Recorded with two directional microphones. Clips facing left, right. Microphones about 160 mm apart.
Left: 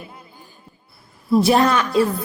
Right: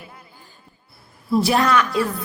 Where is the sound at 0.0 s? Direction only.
20° left (ahead or behind).